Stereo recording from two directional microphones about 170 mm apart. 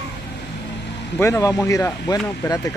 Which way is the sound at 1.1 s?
15° left (ahead or behind).